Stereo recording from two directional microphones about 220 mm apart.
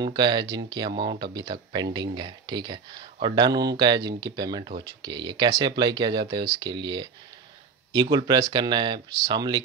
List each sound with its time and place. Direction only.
0.0 s speech: 20° right (ahead or behind)